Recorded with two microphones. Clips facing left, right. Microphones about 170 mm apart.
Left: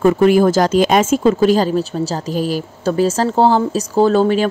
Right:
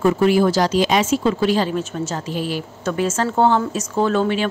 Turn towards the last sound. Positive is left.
turn(degrees=40)  # may be behind; listen again after turning